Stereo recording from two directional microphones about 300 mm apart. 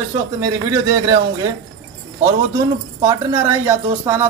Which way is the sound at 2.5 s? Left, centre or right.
Centre.